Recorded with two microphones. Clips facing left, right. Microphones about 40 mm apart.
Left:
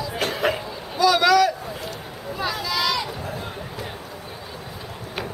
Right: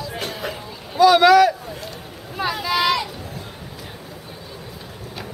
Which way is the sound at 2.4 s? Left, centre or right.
Centre.